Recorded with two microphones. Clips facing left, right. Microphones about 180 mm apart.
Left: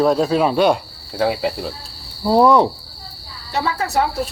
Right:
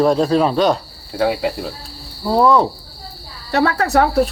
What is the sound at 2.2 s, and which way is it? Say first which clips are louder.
Speech: left 1 dB; 15° left (ahead or behind).